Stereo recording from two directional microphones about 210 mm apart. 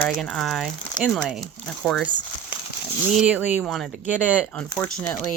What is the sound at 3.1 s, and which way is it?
Speech, 5° right (ahead or behind).